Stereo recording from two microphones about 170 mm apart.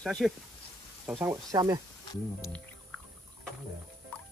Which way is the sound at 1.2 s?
20° right (ahead or behind).